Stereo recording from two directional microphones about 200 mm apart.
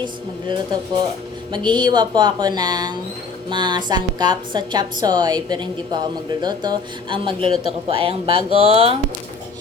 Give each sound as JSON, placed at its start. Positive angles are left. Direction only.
{"t": 0.0, "sound": "speech", "side_deg": -25}